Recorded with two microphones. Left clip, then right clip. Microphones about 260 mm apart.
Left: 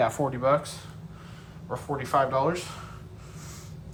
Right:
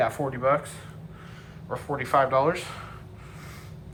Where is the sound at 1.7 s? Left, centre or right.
Centre.